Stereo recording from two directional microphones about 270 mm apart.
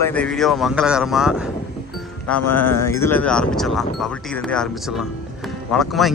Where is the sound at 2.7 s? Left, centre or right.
Centre.